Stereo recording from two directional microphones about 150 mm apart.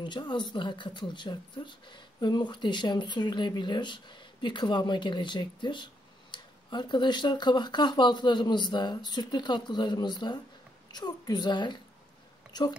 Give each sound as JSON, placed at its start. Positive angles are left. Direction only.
{"t": 0.0, "sound": "speech", "side_deg": 30}